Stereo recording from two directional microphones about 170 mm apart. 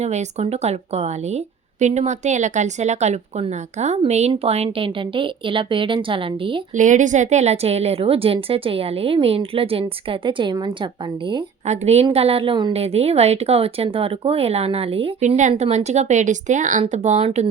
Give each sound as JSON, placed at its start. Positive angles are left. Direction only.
{"t": 0.0, "sound": "a woman's voice", "side_deg": -40}
{"t": 6.7, "sound": "a woman's voice", "side_deg": -45}
{"t": 11.6, "sound": "a woman's voice", "side_deg": -40}